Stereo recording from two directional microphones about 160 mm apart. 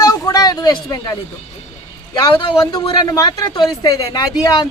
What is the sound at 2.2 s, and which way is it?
Speech, 30° left (ahead or behind).